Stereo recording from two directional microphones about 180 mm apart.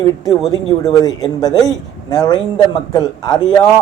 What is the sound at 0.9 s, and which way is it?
Speech, 20° left (ahead or behind).